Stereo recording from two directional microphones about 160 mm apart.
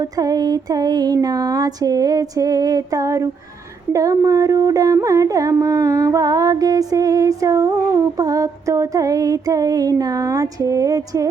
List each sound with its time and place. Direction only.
0.0 s music: 25° right (ahead or behind)